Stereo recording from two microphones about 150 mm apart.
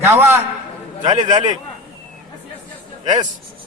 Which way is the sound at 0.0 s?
15° right (ahead or behind).